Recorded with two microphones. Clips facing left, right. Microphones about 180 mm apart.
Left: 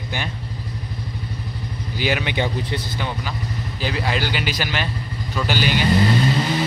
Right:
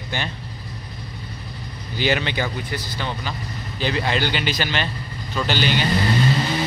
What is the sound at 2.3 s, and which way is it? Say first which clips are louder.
Speech: left 3 dB; 20° left (ahead or behind).